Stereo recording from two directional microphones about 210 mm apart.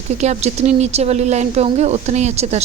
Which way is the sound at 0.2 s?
30° right (ahead or behind).